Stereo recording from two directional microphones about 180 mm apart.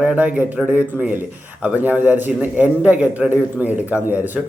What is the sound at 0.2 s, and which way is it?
A man's voice, 10° right (ahead or behind).